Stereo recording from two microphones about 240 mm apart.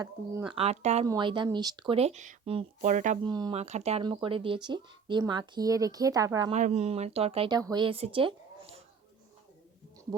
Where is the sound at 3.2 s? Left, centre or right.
Centre.